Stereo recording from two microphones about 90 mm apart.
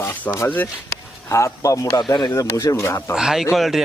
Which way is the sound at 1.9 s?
50° left (ahead or behind).